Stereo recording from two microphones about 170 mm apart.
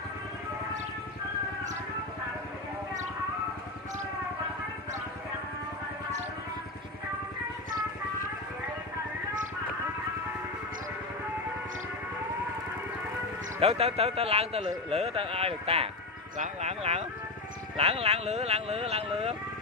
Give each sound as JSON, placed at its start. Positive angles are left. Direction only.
{"t": 13.6, "sound": "a man's voice", "side_deg": -35}